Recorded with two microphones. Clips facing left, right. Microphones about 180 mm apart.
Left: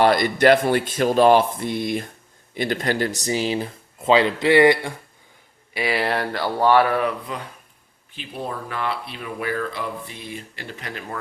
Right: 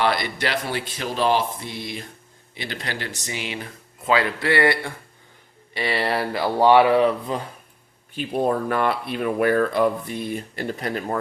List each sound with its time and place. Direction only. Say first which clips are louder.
0.0 s speech: left 7 dB; 45° left (ahead or behind); by 4.9 s 15° left (ahead or behind)
5.7 s speech: left 1 dB; 5° left (ahead or behind)
6.6 s speech: right 3 dB; 15° right (ahead or behind)
7.0 s speech: right 5 dB; 30° right (ahead or behind)
8.1 s speech: right 9 dB; 50° right (ahead or behind)